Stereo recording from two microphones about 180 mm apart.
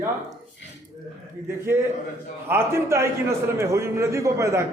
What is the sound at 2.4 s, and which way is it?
A man's voice, 15° right (ahead or behind).